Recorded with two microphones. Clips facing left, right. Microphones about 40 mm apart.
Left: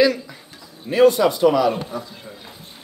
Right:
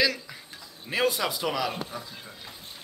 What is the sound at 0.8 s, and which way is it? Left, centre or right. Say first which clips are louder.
Speech: left 12 dB; centre.